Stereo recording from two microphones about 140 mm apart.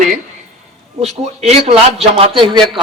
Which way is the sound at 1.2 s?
50° right (ahead or behind).